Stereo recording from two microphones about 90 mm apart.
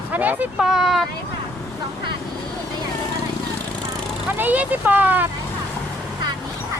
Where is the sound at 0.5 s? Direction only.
5° right (ahead or behind).